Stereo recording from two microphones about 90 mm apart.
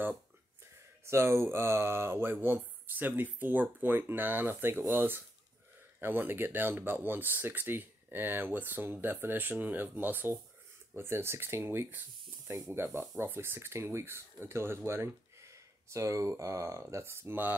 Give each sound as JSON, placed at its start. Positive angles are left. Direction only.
{"t": 1.0, "sound": "speech", "side_deg": -30}